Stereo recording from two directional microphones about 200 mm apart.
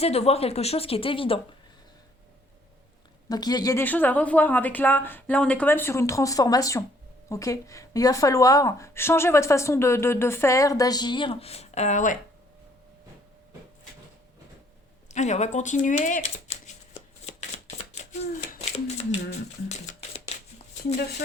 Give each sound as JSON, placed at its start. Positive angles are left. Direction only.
{"t": 0.0, "sound": "speech", "side_deg": 30}
{"t": 3.2, "sound": "a woman's voice", "side_deg": 20}
{"t": 15.1, "sound": "speech", "side_deg": 35}
{"t": 17.9, "sound": "a sound", "side_deg": 35}